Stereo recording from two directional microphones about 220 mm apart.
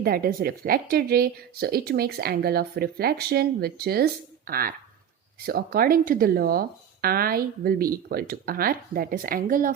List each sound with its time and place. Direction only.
0.0 s speech: 45° right (ahead or behind)